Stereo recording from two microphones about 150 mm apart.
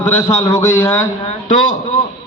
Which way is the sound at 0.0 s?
15° left (ahead or behind).